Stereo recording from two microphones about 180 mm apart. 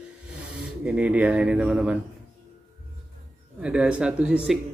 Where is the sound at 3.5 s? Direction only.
5° right (ahead or behind).